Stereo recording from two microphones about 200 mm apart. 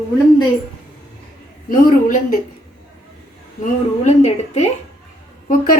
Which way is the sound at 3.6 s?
35° left (ahead or behind).